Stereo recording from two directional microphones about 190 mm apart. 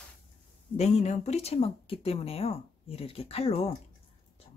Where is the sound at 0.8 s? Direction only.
35° left (ahead or behind).